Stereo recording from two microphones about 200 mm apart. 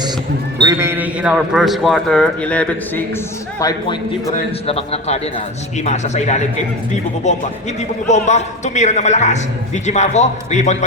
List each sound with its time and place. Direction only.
0.6 s a man's voice: 15° right (ahead or behind); by 3.0 s 5° left (ahead or behind)
3.6 s a man's voice: 20° left (ahead or behind)
4.4 s a man's voice: 30° left (ahead or behind)